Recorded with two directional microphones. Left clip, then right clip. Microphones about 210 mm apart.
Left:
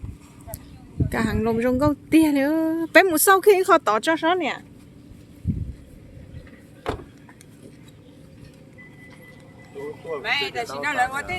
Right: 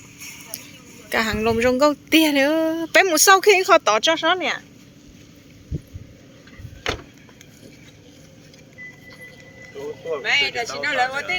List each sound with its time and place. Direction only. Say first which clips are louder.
1.1 s speech: right 4 dB; 10° left (ahead or behind); by 4.6 s 25° left (ahead or behind)
10.1 s a sound: right 5 dB; 20° left (ahead or behind)
10.5 s speech: right 2 dB; 35° left (ahead or behind)
10.9 s speech: right 2 dB; 10° left (ahead or behind)